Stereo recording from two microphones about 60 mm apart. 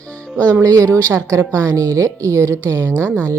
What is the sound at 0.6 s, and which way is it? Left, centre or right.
Speech, right.